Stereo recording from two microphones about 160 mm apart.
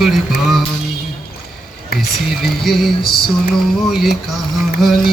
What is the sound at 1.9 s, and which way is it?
Speech, 75° left (ahead or behind).